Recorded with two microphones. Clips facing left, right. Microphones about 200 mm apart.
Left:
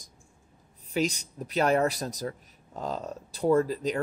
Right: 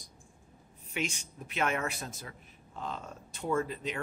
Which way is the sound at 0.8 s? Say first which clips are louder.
Left 8 dB; 35° left (ahead or behind).